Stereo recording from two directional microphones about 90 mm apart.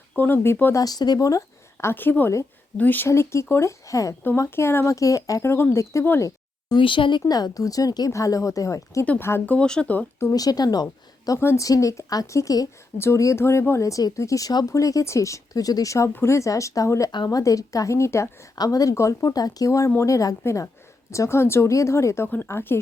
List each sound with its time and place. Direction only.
0.2 s speech: 25° left (ahead or behind)
0.8 s a woman's voice: 45° left (ahead or behind); by 3.1 s 20° left (ahead or behind)
3.1 s a woman's voice: 30° left (ahead or behind)
6.1 s a sound: 40° left (ahead or behind)
6.7 s speech: 70° left (ahead or behind)
7.3 s a woman's voice: 45° left (ahead or behind)
9.0 s speech: 25° left (ahead or behind)
9.6 s speech: 10° left (ahead or behind)
10.3 s speech: 45° left (ahead or behind)
11.3 s a woman's voice: 30° left (ahead or behind)
18.5 s a woman's voice: 45° left (ahead or behind); by 22.8 s 30° left (ahead or behind)